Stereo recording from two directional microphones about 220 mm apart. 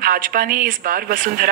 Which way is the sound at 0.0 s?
40° right (ahead or behind).